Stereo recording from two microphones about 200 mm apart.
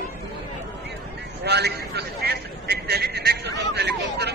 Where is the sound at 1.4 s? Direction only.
55° right (ahead or behind).